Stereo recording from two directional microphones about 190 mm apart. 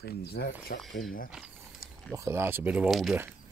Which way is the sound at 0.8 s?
Centre (ahead or behind).